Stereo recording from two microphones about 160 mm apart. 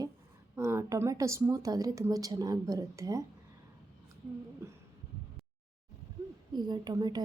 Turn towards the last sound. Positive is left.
turn(degrees=-25)  # may be behind; listen again after turning